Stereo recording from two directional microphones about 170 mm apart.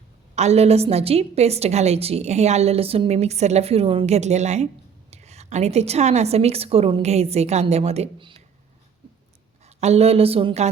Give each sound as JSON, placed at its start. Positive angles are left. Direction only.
{"t": 0.3, "sound": "a woman's voice", "side_deg": -40}
{"t": 9.6, "sound": "a woman's voice", "side_deg": -40}